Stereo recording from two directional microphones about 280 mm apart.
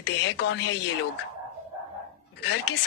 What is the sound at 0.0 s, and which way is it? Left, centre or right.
Speech, left.